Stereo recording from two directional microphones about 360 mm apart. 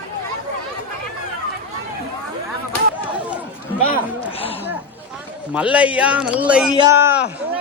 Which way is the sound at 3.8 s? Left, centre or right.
Centre.